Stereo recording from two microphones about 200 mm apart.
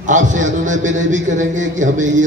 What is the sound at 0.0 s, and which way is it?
A man's voice, 40° right (ahead or behind).